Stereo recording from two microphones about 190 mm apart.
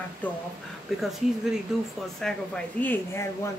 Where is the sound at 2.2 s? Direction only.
5° left (ahead or behind).